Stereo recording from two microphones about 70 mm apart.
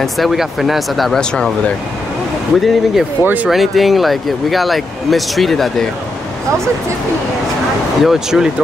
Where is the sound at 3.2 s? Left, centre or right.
Right.